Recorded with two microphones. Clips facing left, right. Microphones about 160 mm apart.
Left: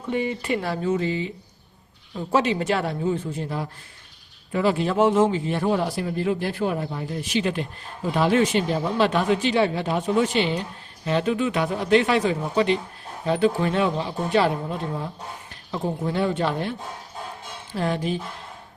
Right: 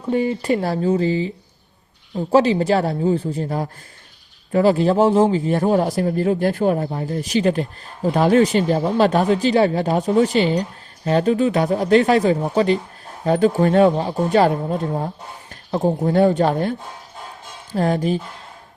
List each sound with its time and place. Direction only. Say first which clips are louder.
0.1 s a man's voice: right 6 dB; 40° right (ahead or behind)